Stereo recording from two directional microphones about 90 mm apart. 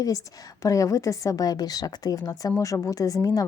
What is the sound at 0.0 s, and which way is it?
A woman's voice, 40° left (ahead or behind).